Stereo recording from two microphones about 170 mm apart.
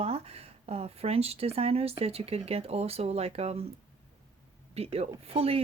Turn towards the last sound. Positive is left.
turn(degrees=-35)  # may be behind; listen again after turning